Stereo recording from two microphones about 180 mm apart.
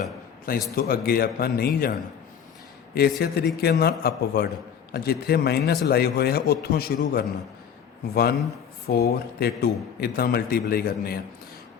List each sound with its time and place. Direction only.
0.0 s a sound: 50° left (ahead or behind)
0.8 s a man's voice: 55° left (ahead or behind)
3.2 s a man's voice: 60° left (ahead or behind)